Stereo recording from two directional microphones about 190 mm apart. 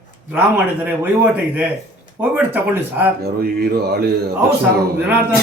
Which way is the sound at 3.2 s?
55° right (ahead or behind).